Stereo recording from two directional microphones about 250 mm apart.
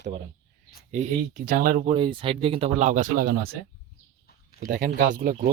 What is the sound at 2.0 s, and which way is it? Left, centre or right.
Speech, centre.